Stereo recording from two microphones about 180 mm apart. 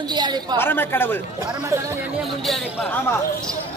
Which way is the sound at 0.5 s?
10° left (ahead or behind).